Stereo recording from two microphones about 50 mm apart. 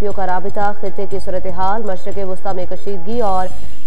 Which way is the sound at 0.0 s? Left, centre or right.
Right.